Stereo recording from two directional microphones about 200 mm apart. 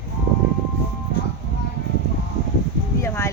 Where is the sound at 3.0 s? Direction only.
15° left (ahead or behind).